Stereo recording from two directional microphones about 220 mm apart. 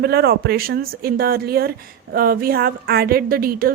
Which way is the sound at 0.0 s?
45° right (ahead or behind).